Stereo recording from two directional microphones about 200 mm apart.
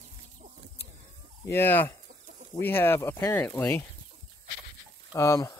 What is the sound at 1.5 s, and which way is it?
Speech, 10° left (ahead or behind).